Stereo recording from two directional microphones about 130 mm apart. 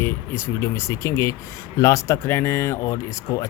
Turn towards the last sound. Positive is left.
turn(degrees=20)  # may be behind; listen again after turning